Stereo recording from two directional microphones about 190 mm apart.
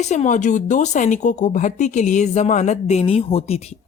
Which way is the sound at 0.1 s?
40° left (ahead or behind).